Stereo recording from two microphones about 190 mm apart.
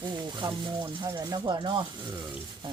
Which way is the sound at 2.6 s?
25° right (ahead or behind).